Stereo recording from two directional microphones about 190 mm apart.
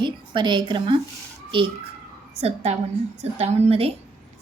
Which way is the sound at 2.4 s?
35° right (ahead or behind).